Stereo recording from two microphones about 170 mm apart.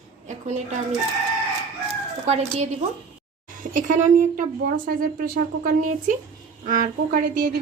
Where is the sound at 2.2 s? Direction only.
40° right (ahead or behind).